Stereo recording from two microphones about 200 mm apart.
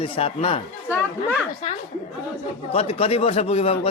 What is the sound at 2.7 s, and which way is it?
Speech, 30° left (ahead or behind).